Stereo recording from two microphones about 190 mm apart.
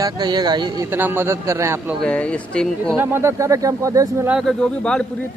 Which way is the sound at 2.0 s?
5° left (ahead or behind).